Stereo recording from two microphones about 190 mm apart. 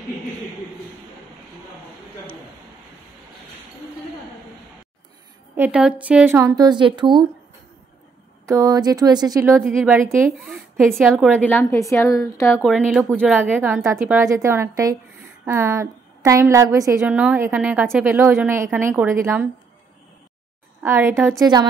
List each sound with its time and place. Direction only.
5.6 s a woman's voice: 5° right (ahead or behind); by 7.2 s 25° right (ahead or behind)
8.5 s speech: 20° right (ahead or behind)
9.6 s a woman's voice: centre (ahead or behind); by 12.5 s 15° left (ahead or behind)
12.6 s a woman's voice: centre (ahead or behind)
21.0 s speech: 5° right (ahead or behind)
21.4 s speech: 20° right (ahead or behind)